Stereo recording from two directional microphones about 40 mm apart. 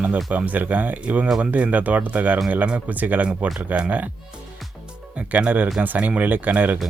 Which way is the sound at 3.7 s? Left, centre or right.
Right.